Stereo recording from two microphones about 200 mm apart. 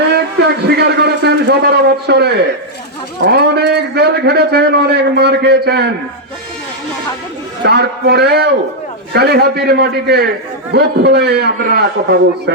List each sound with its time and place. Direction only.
0.1 s a sound: 55° right (ahead or behind)
2.0 s a man's voice: 55° right (ahead or behind)
7.6 s a man's voice: 55° right (ahead or behind)